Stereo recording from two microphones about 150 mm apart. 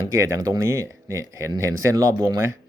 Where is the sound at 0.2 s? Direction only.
20° right (ahead or behind).